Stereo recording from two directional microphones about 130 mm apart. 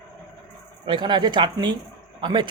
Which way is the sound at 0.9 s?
35° right (ahead or behind).